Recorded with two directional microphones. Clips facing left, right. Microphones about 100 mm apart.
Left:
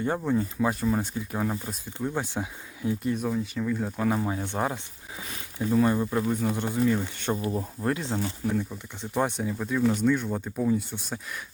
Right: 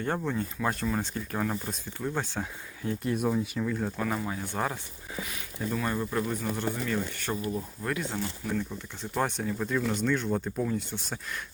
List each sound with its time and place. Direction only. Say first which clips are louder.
0.3 s speech: left 5 dB; 10° left (ahead or behind)
3.2 s speech: even; 10° right (ahead or behind)
3.9 s speech: left 4 dB; 20° left (ahead or behind)
5.9 s speech: left 4 dB; 15° left (ahead or behind)